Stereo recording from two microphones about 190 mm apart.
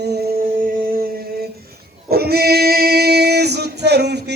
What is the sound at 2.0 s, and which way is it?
Male singing, 55° right (ahead or behind).